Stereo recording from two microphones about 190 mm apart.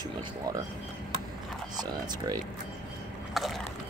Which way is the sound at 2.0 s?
20° right (ahead or behind).